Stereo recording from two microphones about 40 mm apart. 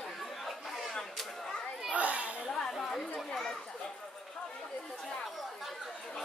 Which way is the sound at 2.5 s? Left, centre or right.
Centre.